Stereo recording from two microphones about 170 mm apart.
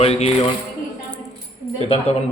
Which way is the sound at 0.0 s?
40° left (ahead or behind).